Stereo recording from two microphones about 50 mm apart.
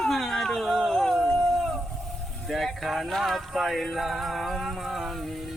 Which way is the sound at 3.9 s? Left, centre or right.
Centre.